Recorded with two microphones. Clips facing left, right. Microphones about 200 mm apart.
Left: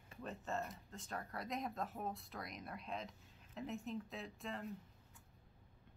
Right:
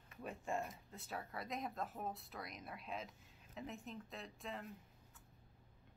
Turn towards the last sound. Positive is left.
turn(degrees=0)  # may be behind; listen again after turning